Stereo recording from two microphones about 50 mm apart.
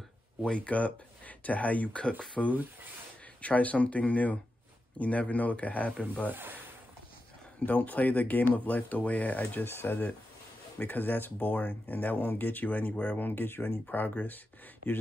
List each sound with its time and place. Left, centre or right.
0.4 s speech: left
3.3 s speech: left
6.3 s speech: right
7.6 s speech: left
9.7 s speech: left
13.8 s speech: left